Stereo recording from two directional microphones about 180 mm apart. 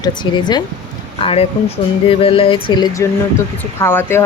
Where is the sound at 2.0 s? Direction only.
30° left (ahead or behind).